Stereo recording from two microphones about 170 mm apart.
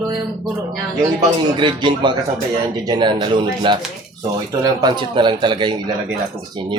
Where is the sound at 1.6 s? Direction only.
25° right (ahead or behind).